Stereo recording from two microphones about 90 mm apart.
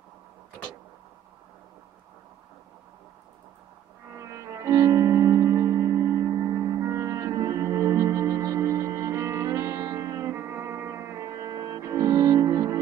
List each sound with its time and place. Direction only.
4.2 s music: 35° right (ahead or behind)